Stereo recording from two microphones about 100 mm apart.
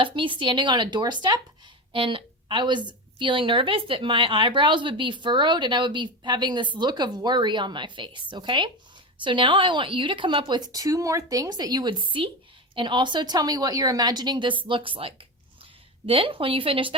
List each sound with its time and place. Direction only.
0.0 s a woman's voice: 55° right (ahead or behind)
1.9 s a woman's voice: 60° right (ahead or behind)